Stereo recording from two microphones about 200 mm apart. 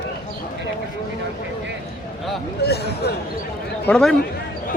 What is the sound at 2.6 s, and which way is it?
Speech, 55° left (ahead or behind).